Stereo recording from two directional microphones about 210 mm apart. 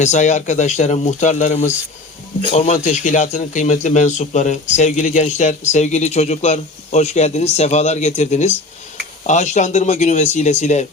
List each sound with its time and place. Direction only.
0.0 s speech: 35° left (ahead or behind)